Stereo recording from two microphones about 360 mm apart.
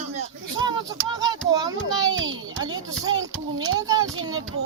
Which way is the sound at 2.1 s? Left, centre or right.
Right.